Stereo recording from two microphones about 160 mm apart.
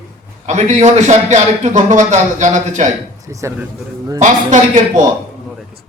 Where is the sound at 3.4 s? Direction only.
15° right (ahead or behind).